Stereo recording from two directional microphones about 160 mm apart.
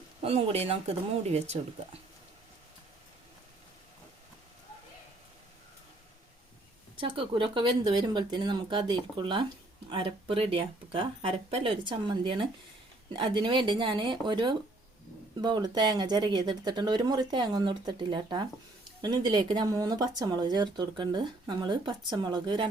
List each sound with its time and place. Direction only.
0.2 s speech: 40° right (ahead or behind)
7.0 s speech: 35° right (ahead or behind)